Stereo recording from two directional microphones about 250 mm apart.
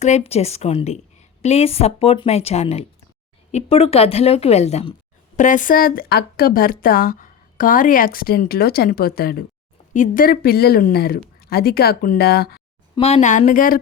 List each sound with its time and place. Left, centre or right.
0.0 s a woman's voice: left
13.0 s a woman's voice: left